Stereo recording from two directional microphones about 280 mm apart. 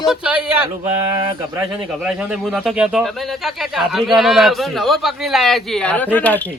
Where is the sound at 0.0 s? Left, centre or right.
Centre.